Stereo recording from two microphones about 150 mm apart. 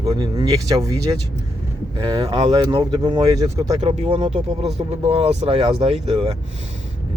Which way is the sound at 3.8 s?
40° right (ahead or behind).